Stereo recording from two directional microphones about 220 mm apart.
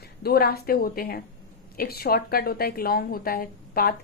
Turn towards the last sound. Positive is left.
turn(degrees=40)  # may be behind; listen again after turning